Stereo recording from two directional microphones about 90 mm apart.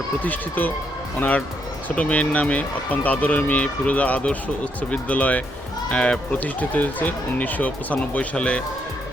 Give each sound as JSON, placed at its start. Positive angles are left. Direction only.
{"t": 0.2, "sound": "speech", "side_deg": 20}
{"t": 2.0, "sound": "speech", "side_deg": 15}